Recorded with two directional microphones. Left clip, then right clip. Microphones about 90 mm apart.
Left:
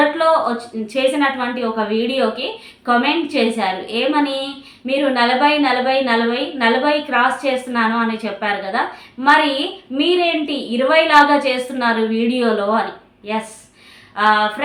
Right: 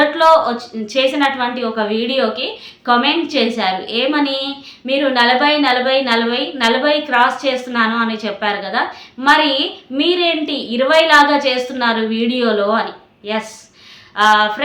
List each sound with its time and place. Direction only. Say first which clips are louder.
0.2 s a woman's voice: right 4 dB; 20° right (ahead or behind)
14.2 s a woman's voice: right 3 dB; 20° right (ahead or behind)